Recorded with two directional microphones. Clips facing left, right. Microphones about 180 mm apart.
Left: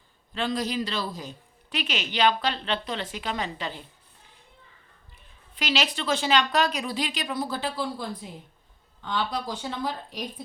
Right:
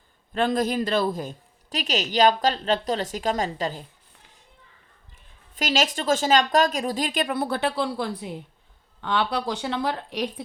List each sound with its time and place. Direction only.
0.3 s a woman's voice: 50° right (ahead or behind)
5.5 s a woman's voice: 45° right (ahead or behind); by 10.4 s 70° right (ahead or behind)